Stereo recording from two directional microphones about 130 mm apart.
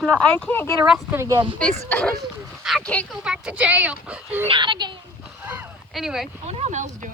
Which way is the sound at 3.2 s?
5° right (ahead or behind).